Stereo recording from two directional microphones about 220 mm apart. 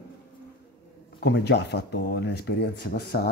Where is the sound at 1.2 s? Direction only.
50° left (ahead or behind).